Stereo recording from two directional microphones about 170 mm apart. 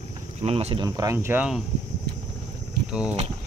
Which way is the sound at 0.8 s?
20° right (ahead or behind).